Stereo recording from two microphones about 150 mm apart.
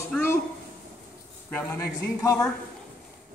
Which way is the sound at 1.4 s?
15° left (ahead or behind).